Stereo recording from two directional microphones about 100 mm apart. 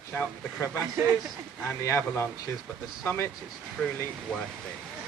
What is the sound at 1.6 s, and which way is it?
Speech, 30° left (ahead or behind).